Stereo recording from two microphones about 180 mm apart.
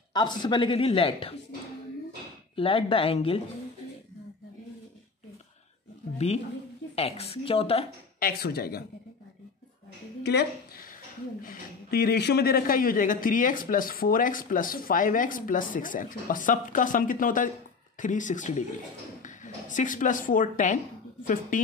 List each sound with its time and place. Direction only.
0.1 s a woman's voice: 25° left (ahead or behind)
2.5 s speech: 30° left (ahead or behind)
6.1 s speech: 35° left (ahead or behind)
8.2 s speech: 55° left (ahead or behind)
11.4 s speech: 55° left (ahead or behind)